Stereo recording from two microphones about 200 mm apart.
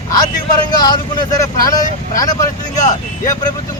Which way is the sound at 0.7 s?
20° left (ahead or behind).